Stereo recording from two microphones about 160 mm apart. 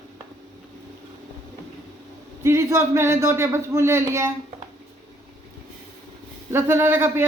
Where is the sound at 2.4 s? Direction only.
15° right (ahead or behind).